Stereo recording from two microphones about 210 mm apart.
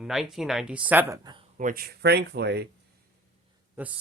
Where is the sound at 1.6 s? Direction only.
40° right (ahead or behind).